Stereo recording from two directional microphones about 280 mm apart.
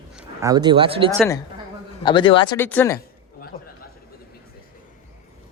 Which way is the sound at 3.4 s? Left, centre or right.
Left.